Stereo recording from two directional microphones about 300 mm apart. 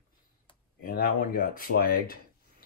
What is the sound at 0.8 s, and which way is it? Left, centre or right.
Speech, left.